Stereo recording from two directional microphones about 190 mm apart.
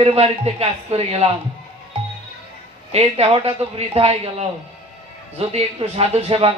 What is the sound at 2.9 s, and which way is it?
Speech, 30° right (ahead or behind).